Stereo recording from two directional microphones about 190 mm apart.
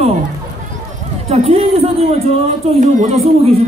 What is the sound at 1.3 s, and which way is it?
Speech, 30° right (ahead or behind).